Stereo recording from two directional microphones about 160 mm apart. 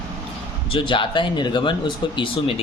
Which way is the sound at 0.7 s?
30° left (ahead or behind).